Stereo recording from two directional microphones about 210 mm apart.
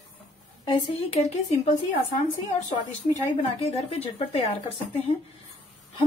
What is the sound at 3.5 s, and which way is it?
A woman's voice, 30° left (ahead or behind).